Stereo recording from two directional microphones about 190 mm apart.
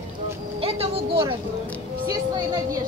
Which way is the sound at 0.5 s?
30° right (ahead or behind).